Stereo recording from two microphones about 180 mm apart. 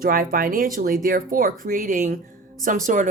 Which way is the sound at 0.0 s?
50° right (ahead or behind).